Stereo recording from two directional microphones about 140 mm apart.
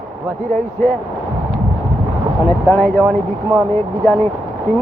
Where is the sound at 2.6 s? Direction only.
15° left (ahead or behind).